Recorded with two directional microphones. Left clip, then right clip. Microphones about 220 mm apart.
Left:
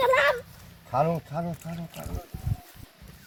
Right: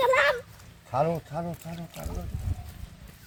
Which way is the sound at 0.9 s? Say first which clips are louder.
Left 1 dB; 15° left (ahead or behind).